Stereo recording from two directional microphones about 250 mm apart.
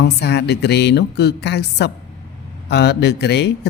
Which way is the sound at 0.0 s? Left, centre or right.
Left.